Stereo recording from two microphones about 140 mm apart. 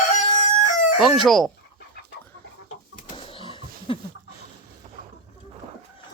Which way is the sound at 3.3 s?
40° left (ahead or behind).